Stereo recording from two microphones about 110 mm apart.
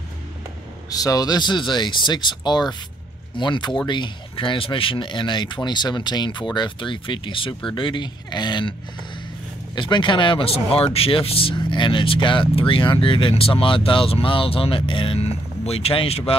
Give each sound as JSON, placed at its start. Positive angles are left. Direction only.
{"t": 0.8, "sound": "speech", "side_deg": 35}
{"t": 9.8, "sound": "speech", "side_deg": 45}